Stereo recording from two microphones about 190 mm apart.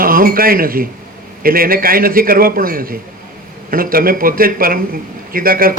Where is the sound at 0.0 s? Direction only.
50° right (ahead or behind).